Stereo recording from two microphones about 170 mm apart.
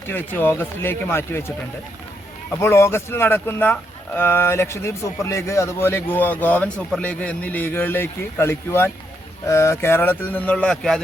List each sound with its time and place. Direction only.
0.1 s speech: 10° left (ahead or behind)